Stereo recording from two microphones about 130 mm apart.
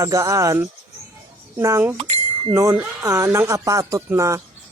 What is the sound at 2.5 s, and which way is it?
Speech, 20° right (ahead or behind).